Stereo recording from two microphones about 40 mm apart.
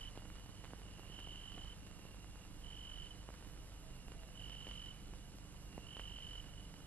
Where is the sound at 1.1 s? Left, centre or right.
Left.